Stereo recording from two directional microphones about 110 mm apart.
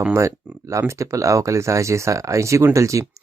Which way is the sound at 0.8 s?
25° right (ahead or behind).